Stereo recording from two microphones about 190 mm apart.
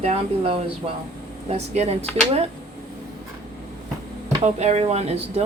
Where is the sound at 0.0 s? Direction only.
30° right (ahead or behind).